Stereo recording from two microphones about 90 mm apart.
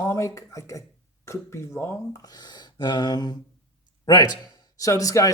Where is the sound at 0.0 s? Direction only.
35° left (ahead or behind).